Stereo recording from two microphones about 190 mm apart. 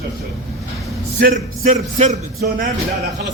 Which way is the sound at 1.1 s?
45° right (ahead or behind).